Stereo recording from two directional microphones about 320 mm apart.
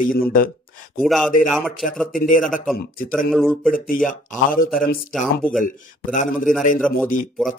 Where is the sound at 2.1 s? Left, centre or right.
Left.